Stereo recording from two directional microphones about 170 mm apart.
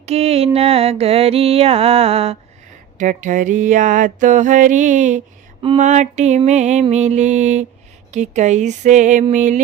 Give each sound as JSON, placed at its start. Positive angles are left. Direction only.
{"t": 0.0, "sound": "mantra", "side_deg": -35}
{"t": 3.0, "sound": "mantra", "side_deg": -50}